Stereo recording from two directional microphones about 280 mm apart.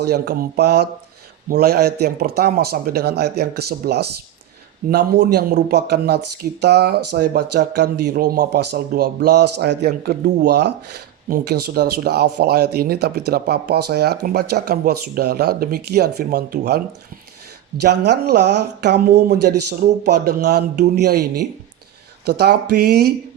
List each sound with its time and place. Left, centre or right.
0.0 s speech: right
17.8 s speech: right